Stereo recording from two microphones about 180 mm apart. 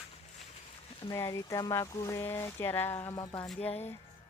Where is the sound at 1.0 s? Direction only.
20° left (ahead or behind).